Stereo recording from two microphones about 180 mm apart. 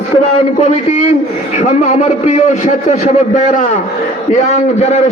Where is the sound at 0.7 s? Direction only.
40° left (ahead or behind).